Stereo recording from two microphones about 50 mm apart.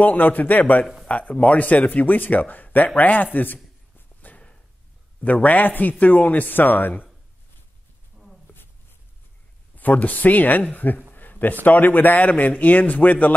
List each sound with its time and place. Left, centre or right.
0.0 s a man's voice: left
1.0 s a man's voice: left
5.2 s a man's voice: left
8.5 s a sound: left
9.8 s a man's voice: left
11.1 s a sound: left
11.6 s a man's voice: left